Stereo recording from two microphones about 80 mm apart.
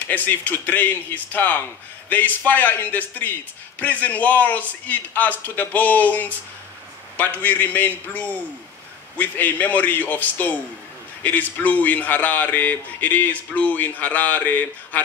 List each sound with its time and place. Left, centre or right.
0.0 s a man's voice: left